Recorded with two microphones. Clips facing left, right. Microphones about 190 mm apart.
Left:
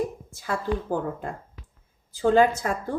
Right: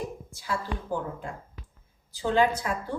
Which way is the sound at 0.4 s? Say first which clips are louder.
Left 5 dB; 55° left (ahead or behind).